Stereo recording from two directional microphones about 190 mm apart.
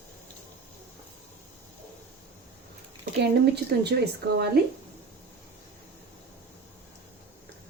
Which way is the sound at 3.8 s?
60° right (ahead or behind).